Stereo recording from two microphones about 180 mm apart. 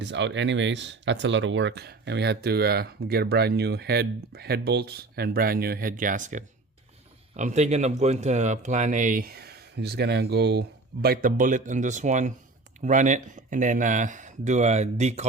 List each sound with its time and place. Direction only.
0.0 s speech: 80° right; by 15.3 s 40° right (ahead or behind)